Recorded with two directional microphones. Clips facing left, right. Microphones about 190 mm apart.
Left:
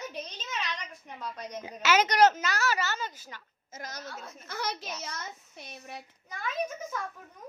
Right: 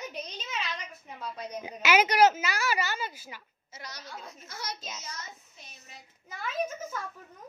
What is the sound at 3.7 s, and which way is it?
A woman's voice, 45° left (ahead or behind).